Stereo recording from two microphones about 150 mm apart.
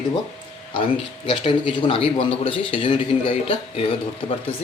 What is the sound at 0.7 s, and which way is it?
A man's voice, 35° left (ahead or behind).